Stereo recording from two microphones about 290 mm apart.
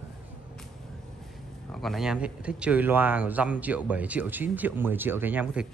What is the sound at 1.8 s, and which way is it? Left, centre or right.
Speech, centre.